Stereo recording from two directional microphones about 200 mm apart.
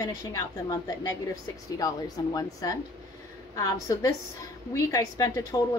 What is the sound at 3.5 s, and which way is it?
A woman's voice, 15° left (ahead or behind).